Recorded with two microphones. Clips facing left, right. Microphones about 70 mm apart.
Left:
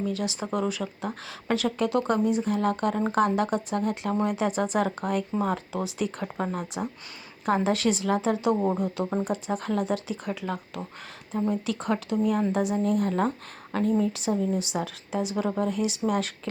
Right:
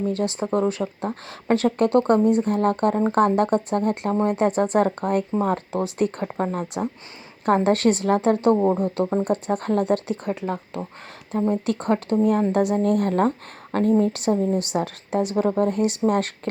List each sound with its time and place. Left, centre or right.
0.0 s a woman's voice: right
4.1 s speech: right
4.4 s a woman's voice: right
10.2 s speech: right
11.3 s a woman's voice: right